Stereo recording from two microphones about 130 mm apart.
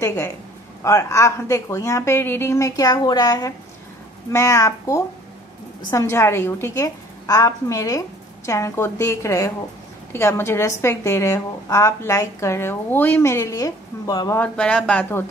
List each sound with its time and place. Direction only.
0.0 s a woman's voice: 20° left (ahead or behind)
14.3 s speech: 10° left (ahead or behind)